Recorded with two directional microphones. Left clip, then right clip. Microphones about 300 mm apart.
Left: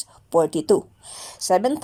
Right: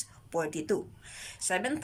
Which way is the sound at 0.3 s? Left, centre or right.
Centre.